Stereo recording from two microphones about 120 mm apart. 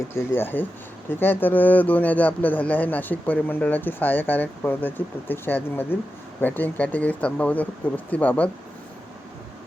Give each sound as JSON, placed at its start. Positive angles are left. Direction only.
{"t": 0.1, "sound": "speech", "side_deg": 20}